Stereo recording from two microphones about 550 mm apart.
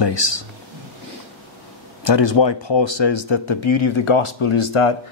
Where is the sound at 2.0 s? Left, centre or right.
Left.